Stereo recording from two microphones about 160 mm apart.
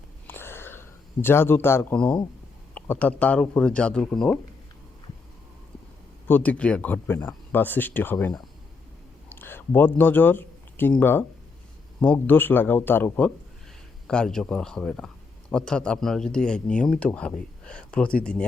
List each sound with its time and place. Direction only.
0.3 s a sound: 15° left (ahead or behind)
2.7 s speech: 10° left (ahead or behind)
6.2 s speech: 10° left (ahead or behind)
9.3 s speech: 15° left (ahead or behind)